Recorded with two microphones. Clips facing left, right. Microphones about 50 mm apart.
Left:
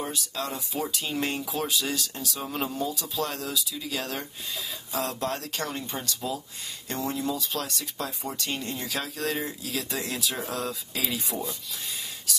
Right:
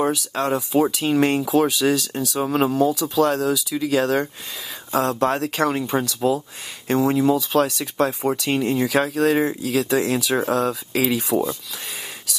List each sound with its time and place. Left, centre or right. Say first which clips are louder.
0.0 s speech: right 11 dB; right
2.4 s speech: right 12 dB; right
4.9 s speech: right 10 dB; right